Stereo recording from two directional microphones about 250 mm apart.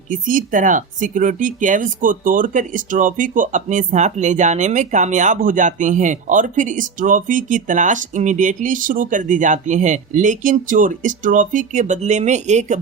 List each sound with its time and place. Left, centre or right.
0.1 s speech: right